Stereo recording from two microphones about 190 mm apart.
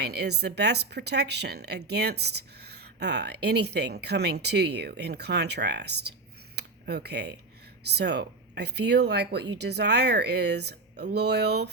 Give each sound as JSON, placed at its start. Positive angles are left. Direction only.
{"t": 0.0, "sound": "speech", "side_deg": -60}
{"t": 6.6, "sound": "a sound", "side_deg": -60}
{"t": 7.9, "sound": "speech", "side_deg": -60}